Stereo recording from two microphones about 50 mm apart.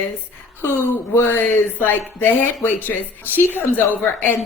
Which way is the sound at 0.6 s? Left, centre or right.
Left.